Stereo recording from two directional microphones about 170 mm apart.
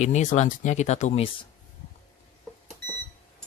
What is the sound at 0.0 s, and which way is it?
Speech, 45° left (ahead or behind).